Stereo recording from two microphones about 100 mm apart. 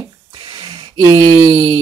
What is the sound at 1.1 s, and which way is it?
Speech, 40° right (ahead or behind).